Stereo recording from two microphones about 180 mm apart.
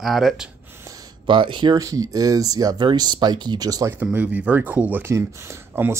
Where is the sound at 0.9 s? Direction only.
25° right (ahead or behind).